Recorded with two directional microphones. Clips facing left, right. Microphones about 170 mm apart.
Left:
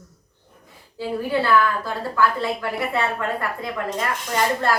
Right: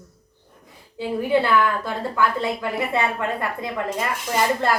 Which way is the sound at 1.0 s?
20° right (ahead or behind).